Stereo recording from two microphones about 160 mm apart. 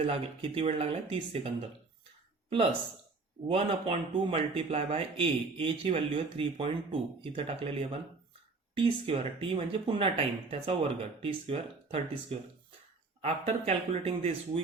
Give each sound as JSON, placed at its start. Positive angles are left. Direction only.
{"t": 0.0, "sound": "speech", "side_deg": -35}
{"t": 3.4, "sound": "speech", "side_deg": -35}
{"t": 13.2, "sound": "speech", "side_deg": -45}